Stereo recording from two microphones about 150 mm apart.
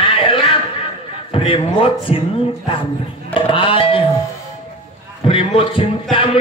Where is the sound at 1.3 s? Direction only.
35° left (ahead or behind).